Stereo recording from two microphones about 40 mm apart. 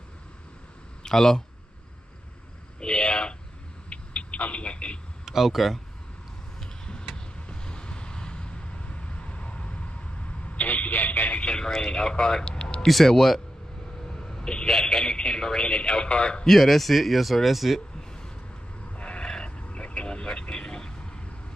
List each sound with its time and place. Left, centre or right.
1.0 s speech: centre
2.8 s a sound: left
5.2 s speech: centre
6.6 s vehicle: left
11.4 s a man's voice: left
12.8 s speech: centre
14.0 s a man's voice: centre
16.4 s speech: centre
18.9 s a sound: left
19.4 s vehicle: left